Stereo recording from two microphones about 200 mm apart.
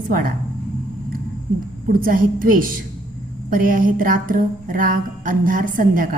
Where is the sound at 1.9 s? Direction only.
45° right (ahead or behind).